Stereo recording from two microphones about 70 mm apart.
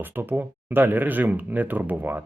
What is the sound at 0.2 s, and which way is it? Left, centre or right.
Speech, right.